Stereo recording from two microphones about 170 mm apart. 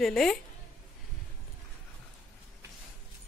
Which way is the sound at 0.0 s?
Centre (ahead or behind).